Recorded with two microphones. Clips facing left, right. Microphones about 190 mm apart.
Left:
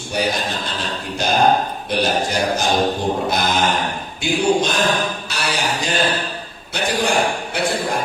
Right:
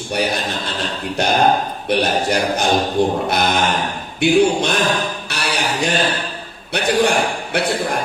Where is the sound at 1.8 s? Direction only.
60° right (ahead or behind).